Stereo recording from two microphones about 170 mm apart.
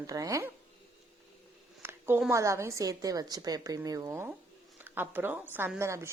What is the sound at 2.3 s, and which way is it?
A woman's voice, 15° right (ahead or behind).